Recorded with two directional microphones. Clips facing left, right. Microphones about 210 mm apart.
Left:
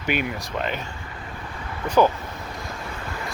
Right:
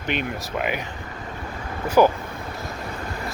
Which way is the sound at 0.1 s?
5° left (ahead or behind).